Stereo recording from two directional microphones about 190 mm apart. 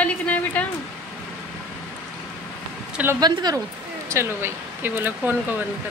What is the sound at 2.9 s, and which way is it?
Speech, 10° right (ahead or behind).